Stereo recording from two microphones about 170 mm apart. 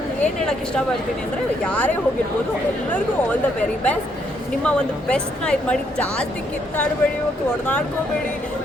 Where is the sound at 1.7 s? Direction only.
10° left (ahead or behind).